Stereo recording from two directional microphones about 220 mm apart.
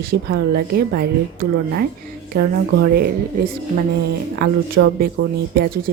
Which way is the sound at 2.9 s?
40° right (ahead or behind).